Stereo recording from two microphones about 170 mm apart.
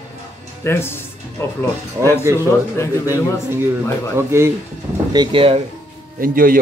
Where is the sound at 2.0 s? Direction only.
15° right (ahead or behind).